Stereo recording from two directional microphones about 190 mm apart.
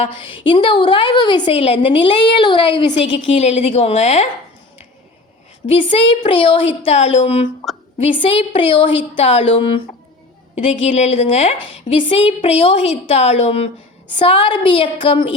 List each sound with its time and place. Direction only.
0.0 s a woman's voice: 30° left (ahead or behind)
5.6 s a woman's voice: 30° left (ahead or behind)